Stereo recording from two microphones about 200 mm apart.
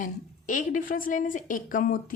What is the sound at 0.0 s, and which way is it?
A woman's voice, 40° left (ahead or behind).